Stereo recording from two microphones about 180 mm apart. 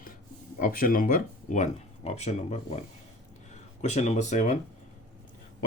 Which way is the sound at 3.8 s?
40° left (ahead or behind).